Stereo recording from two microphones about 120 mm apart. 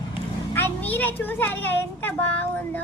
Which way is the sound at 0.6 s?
15° left (ahead or behind).